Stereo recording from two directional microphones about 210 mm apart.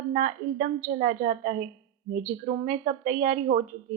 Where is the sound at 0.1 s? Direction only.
40° right (ahead or behind).